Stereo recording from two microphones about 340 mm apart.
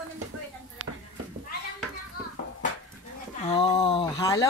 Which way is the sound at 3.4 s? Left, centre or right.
Centre.